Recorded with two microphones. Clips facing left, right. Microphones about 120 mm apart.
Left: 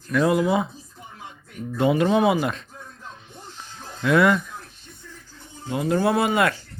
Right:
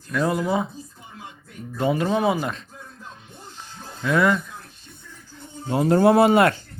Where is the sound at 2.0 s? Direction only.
10° left (ahead or behind).